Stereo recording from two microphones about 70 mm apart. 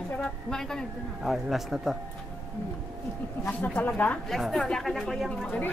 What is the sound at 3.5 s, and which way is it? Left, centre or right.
Speech, left.